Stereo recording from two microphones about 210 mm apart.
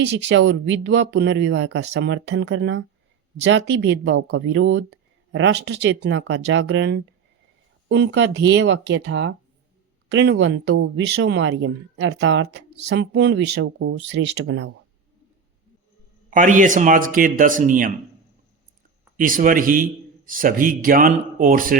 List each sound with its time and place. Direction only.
0.0 s speech: 55° right (ahead or behind)
16.3 s a man's voice: 40° right (ahead or behind)
19.1 s a man's voice: 40° right (ahead or behind)